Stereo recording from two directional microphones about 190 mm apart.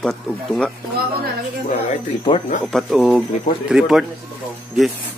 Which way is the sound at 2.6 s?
Centre (ahead or behind).